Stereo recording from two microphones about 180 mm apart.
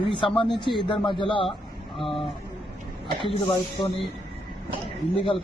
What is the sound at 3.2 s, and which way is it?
Speech, 30° left (ahead or behind).